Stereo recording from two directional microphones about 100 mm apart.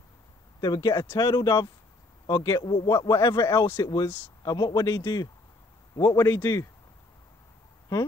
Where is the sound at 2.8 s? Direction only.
40° left (ahead or behind).